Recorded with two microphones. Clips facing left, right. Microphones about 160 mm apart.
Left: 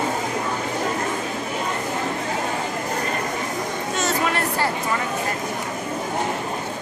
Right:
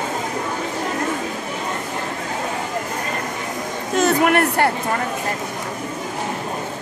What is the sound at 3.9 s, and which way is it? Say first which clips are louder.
Speech: right 8 dB; 60° right (ahead or behind).